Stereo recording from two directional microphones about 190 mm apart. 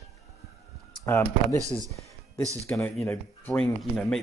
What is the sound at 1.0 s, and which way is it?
Speech, 10° left (ahead or behind).